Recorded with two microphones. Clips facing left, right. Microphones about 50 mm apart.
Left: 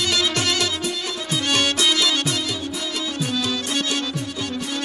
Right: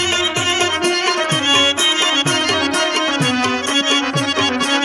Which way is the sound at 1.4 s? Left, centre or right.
Right.